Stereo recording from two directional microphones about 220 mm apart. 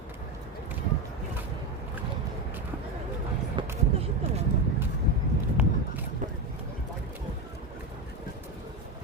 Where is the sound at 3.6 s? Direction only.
20° right (ahead or behind).